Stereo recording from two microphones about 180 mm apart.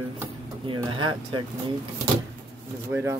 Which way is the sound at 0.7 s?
25° right (ahead or behind).